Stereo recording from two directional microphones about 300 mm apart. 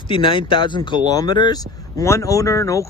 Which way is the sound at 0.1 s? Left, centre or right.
Centre.